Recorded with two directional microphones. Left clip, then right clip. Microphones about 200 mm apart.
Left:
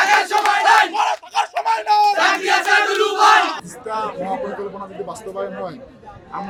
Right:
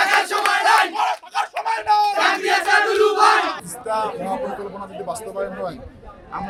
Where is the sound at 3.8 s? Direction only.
10° right (ahead or behind).